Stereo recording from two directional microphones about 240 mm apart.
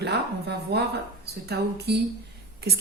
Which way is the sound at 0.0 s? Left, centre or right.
Right.